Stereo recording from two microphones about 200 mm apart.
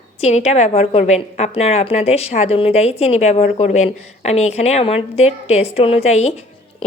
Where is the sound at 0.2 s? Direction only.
30° left (ahead or behind).